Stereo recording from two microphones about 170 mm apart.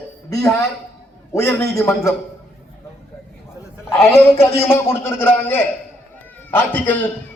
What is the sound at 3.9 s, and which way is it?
A man's voice, 15° left (ahead or behind).